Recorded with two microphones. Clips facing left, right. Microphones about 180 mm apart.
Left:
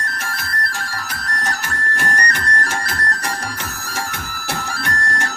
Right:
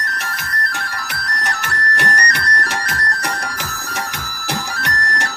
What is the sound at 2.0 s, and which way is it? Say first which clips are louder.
Music: right 1 dB; 40° right (ahead or behind).